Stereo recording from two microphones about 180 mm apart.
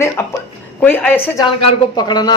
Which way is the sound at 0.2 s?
15° left (ahead or behind).